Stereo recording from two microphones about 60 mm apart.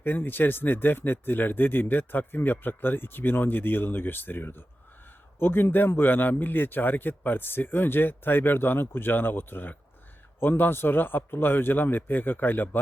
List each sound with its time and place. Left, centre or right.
0.0 s speech: left